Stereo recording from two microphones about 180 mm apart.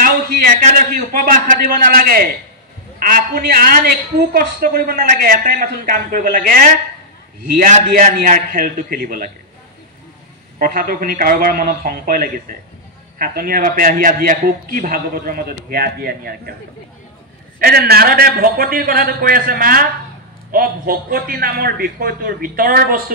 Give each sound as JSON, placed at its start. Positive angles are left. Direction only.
{"t": 0.0, "sound": "a woman's voice", "side_deg": -50}
{"t": 10.6, "sound": "a woman's voice", "side_deg": -50}
{"t": 17.6, "sound": "a man's voice", "side_deg": -60}